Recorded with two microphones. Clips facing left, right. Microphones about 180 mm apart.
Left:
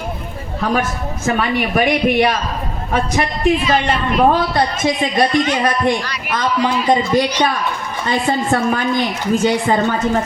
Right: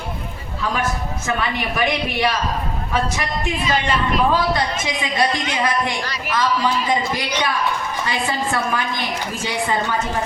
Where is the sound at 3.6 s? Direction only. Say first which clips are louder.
Left 3 dB; 55° left (ahead or behind).